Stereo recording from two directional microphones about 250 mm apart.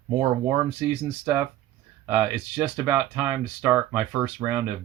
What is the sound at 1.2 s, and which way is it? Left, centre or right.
Speech, centre.